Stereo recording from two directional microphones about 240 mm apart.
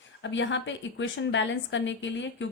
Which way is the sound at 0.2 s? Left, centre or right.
Left.